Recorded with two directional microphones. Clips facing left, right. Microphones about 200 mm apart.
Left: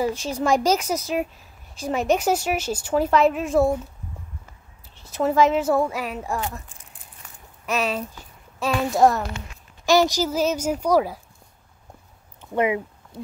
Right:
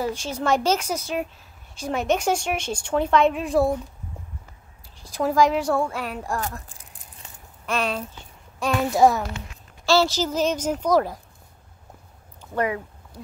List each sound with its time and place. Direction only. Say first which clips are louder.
0.2 s a woman's voice: left 2 dB; 10° left (ahead or behind)
5.1 s speech: left 1 dB; 5° left (ahead or behind)
7.6 s a woman's voice: left 1 dB; 5° left (ahead or behind)
9.8 s a woman's voice: left 2 dB; 15° left (ahead or behind)
12.5 s speech: left 3 dB; 20° left (ahead or behind)